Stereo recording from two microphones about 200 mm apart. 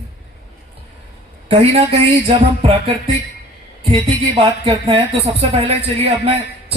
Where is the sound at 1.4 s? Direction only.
30° right (ahead or behind).